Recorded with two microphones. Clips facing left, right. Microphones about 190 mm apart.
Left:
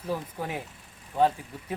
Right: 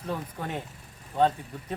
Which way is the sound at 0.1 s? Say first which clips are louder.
Left 1 dB; 10° left (ahead or behind).